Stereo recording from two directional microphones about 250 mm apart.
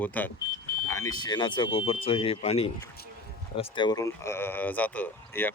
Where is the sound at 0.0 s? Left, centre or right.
Centre.